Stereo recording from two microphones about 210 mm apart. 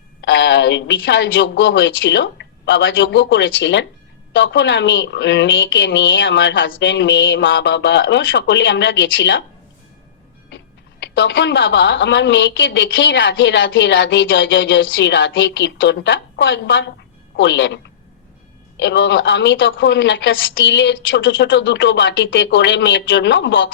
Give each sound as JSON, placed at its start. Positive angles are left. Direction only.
{"t": 0.2, "sound": "a woman's voice", "side_deg": 55}
{"t": 11.0, "sound": "a woman's voice", "side_deg": 60}
{"t": 18.8, "sound": "a woman's voice", "side_deg": 55}